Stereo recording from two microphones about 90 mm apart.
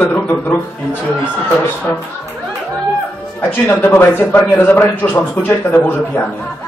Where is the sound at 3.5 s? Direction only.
25° left (ahead or behind).